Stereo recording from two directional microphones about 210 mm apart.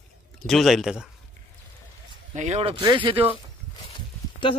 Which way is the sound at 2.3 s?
30° right (ahead or behind).